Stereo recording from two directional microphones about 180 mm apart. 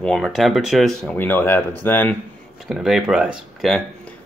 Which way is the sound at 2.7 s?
Centre (ahead or behind).